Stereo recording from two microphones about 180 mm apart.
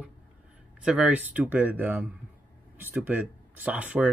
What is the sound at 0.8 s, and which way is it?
Speech, 5° right (ahead or behind).